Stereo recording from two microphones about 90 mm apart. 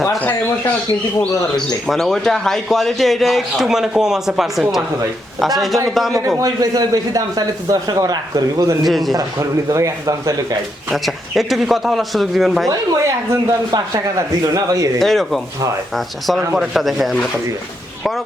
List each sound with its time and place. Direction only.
0.2 s bird: 20° left (ahead or behind)
1.5 s speech: 5° left (ahead or behind)
6.4 s a man's voice: 45° right (ahead or behind)
8.9 s speech: centre (ahead or behind)
9.1 s speech: 45° right (ahead or behind)
10.8 s speech: centre (ahead or behind)
12.6 s speech: 40° right (ahead or behind)
14.9 s speech: centre (ahead or behind)